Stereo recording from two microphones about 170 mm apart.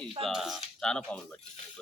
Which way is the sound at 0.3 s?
Centre (ahead or behind).